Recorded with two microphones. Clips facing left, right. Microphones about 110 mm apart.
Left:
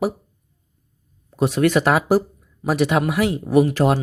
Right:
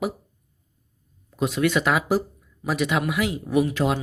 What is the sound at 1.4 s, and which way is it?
Speech, 40° left (ahead or behind).